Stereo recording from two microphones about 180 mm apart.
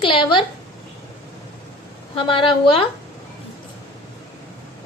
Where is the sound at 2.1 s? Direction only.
30° left (ahead or behind).